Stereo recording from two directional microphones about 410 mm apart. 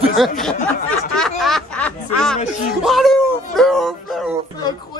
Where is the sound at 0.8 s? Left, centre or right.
Centre.